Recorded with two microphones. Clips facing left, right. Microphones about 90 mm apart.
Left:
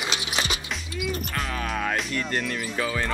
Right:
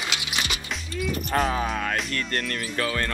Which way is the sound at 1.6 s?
Centre (ahead or behind).